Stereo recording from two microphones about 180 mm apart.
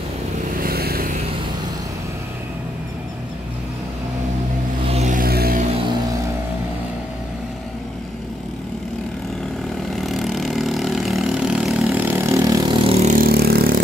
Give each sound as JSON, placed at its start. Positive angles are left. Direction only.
{"t": 0.6, "sound": "vehicle", "side_deg": -55}
{"t": 4.8, "sound": "vehicle", "side_deg": -40}
{"t": 10.0, "sound": "vehicle", "side_deg": 0}
{"t": 13.3, "sound": "vehicle", "side_deg": -60}